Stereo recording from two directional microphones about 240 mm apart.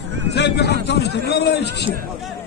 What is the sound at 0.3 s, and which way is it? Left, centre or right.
A man's voice, left.